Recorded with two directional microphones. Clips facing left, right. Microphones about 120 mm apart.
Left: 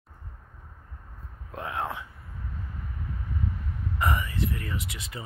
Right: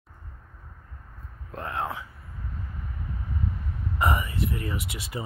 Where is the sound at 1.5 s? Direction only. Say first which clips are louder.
Right 1 dB; 5° left (ahead or behind).